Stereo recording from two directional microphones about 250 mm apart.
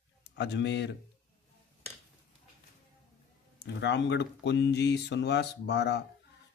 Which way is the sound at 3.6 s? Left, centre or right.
Left.